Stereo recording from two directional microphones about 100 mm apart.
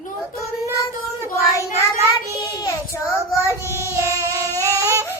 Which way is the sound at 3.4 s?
25° right (ahead or behind).